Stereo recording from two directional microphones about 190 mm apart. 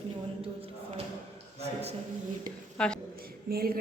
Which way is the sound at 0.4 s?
30° right (ahead or behind).